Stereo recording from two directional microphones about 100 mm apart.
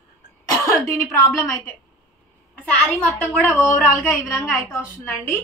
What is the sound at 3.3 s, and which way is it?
Speech, 15° left (ahead or behind).